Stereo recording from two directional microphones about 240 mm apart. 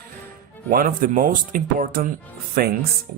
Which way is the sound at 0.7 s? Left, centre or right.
Right.